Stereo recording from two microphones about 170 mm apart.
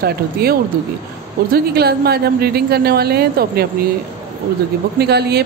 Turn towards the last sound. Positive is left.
turn(degrees=-70)  # may be behind; listen again after turning